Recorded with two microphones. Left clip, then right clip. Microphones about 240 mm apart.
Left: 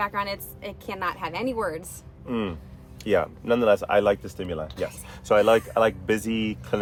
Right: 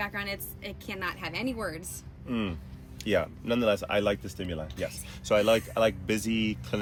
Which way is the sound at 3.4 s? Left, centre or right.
Centre.